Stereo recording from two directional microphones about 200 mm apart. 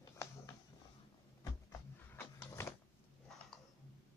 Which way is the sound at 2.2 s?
15° left (ahead or behind).